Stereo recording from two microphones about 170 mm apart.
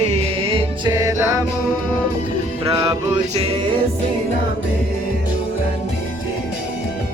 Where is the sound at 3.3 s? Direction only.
35° right (ahead or behind).